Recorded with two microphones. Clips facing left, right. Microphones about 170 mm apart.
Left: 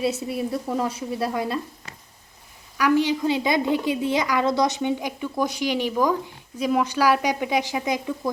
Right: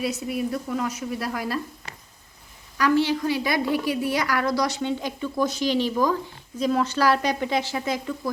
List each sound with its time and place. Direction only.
0.0 s speech: 30° left (ahead or behind)
2.7 s a woman's voice: 15° left (ahead or behind)